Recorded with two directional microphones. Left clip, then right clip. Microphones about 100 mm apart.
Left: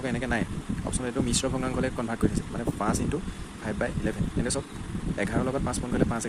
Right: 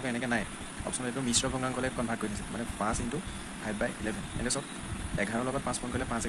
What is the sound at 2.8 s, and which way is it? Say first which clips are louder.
Speech: left 3 dB; 90° left.